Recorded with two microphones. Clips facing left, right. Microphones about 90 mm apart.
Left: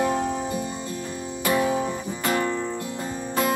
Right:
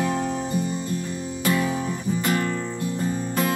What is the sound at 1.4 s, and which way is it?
Music, 25° left (ahead or behind).